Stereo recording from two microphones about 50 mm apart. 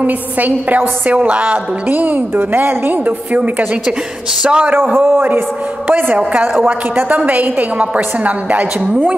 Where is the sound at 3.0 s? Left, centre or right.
Right.